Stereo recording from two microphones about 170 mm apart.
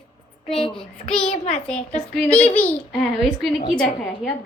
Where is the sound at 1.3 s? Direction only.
35° left (ahead or behind).